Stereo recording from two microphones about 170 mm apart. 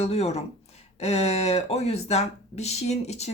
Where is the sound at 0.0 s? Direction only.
40° left (ahead or behind).